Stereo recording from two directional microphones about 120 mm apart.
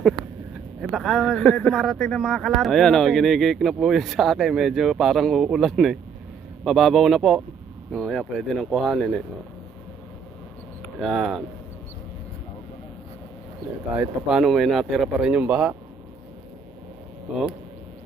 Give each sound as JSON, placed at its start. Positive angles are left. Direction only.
{"t": 0.8, "sound": "speech", "side_deg": -5}
{"t": 11.0, "sound": "speech", "side_deg": 0}
{"t": 13.9, "sound": "speech", "side_deg": -10}